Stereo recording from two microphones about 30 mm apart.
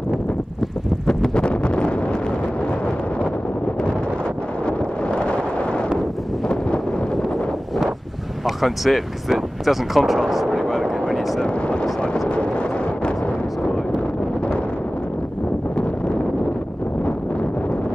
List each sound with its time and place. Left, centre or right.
1.3 s wind noise: left
4.6 s wind noise: left
8.5 s speech: centre
10.5 s vehicle: centre
11.4 s a sound: left